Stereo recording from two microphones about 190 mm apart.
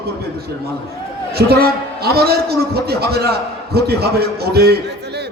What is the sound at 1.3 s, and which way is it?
A man's voice, 55° right (ahead or behind).